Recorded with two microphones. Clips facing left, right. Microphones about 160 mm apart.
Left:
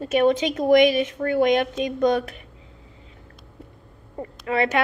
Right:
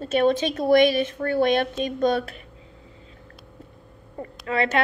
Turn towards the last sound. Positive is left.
turn(degrees=25)  # may be behind; listen again after turning